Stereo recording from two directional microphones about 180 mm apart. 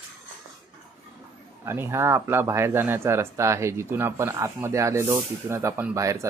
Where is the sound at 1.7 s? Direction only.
15° right (ahead or behind).